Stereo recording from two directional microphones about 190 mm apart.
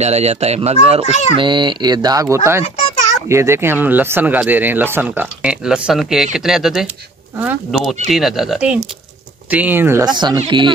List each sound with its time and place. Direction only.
0.0 s speech: 35° right (ahead or behind)